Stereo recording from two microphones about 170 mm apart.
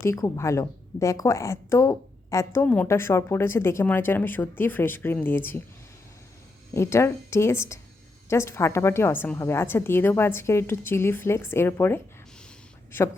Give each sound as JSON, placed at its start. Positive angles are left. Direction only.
{"t": 0.0, "sound": "a woman's voice", "side_deg": 15}
{"t": 6.7, "sound": "a woman's voice", "side_deg": 15}